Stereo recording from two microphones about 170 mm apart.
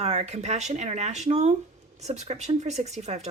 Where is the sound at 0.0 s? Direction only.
40° right (ahead or behind).